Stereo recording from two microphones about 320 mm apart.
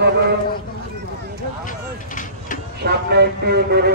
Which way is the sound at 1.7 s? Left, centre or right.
Left.